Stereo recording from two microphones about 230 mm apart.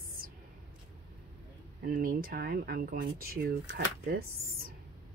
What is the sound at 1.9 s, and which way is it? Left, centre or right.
Speech, right.